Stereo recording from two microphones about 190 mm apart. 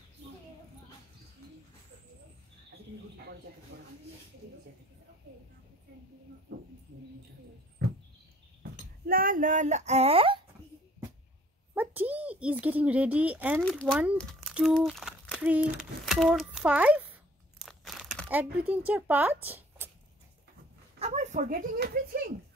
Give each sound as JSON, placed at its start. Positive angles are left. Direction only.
{"t": 3.7, "sound": "speech", "side_deg": -60}
{"t": 9.0, "sound": "speech", "side_deg": -50}
{"t": 11.7, "sound": "speech", "side_deg": -10}
{"t": 13.6, "sound": "speech", "side_deg": 5}
{"t": 17.6, "sound": "crunch", "side_deg": 0}
{"t": 18.9, "sound": "speech", "side_deg": -10}
{"t": 21.0, "sound": "speech", "side_deg": -35}